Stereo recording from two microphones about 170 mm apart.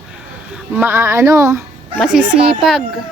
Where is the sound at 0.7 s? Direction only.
10° right (ahead or behind).